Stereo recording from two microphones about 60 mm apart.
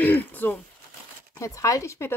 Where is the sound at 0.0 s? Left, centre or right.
Left.